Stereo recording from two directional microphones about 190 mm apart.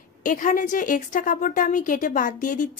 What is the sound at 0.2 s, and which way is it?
A woman's voice, 45° left (ahead or behind).